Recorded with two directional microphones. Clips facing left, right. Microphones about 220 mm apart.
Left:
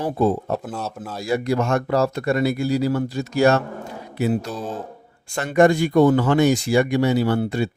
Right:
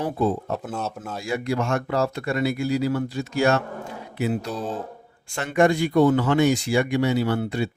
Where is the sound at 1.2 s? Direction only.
40° left (ahead or behind).